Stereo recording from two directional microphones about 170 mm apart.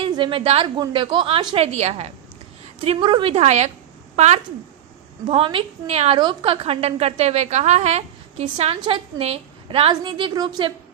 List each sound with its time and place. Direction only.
0.0 s a woman's voice: 30° right (ahead or behind)